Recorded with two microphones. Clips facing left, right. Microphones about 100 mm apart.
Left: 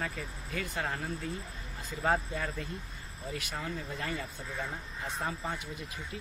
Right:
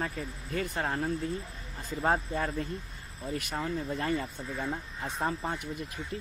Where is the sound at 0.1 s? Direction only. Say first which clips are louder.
Right 4 dB; 40° right (ahead or behind).